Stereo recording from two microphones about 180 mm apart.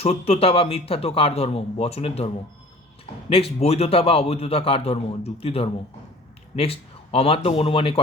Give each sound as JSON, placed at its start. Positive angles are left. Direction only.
{"t": 0.0, "sound": "a man's voice", "side_deg": 35}